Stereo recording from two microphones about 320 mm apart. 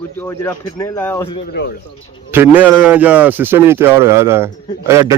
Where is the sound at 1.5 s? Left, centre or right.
Left.